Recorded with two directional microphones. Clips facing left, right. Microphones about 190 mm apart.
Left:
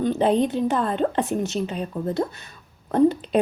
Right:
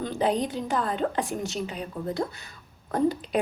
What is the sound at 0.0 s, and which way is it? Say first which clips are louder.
Speech: left 6 dB; 20° left (ahead or behind).